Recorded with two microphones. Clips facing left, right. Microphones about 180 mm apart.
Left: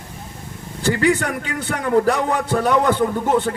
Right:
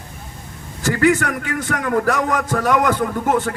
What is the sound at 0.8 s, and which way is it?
A man's voice, 30° left (ahead or behind).